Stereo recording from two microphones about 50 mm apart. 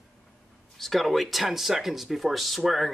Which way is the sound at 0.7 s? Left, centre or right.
Centre.